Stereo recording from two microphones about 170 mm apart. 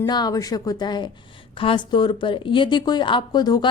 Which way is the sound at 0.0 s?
25° left (ahead or behind).